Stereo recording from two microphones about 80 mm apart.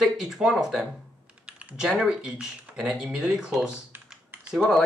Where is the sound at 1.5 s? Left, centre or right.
Centre.